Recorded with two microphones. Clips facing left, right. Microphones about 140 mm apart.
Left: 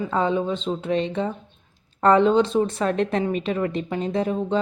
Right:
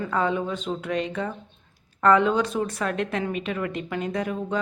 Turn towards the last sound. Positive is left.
turn(degrees=30)  # may be behind; listen again after turning